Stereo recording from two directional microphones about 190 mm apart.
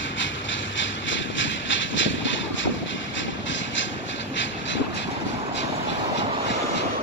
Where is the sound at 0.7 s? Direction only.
75° left (ahead or behind).